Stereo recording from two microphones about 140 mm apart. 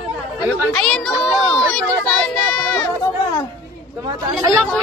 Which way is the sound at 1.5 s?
5° left (ahead or behind).